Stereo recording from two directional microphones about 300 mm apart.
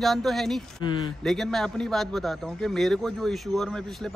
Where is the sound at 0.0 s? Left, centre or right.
Centre.